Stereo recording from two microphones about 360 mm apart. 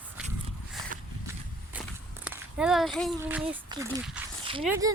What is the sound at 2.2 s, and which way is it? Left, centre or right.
A woman's voice, centre.